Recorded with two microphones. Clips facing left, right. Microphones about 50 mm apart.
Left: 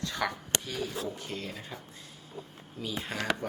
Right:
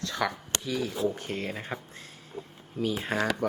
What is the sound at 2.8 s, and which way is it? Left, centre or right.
Speech, right.